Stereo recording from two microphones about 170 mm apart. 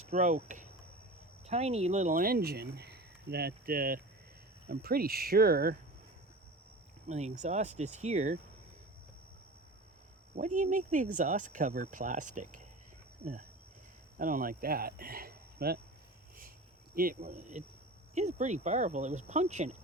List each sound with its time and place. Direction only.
0.0 s speech: 45° right (ahead or behind); by 5.7 s 60° right (ahead or behind)
7.1 s speech: 40° right (ahead or behind)
10.3 s speech: 50° right (ahead or behind)
14.2 s speech: 50° right (ahead or behind)
16.9 s speech: 55° right (ahead or behind)
18.1 s speech: 45° right (ahead or behind)